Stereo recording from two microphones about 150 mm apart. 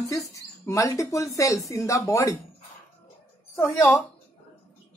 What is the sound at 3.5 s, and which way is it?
Speech, 20° left (ahead or behind).